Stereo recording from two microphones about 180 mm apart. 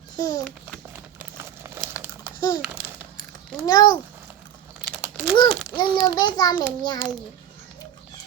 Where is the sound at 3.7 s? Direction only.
20° left (ahead or behind).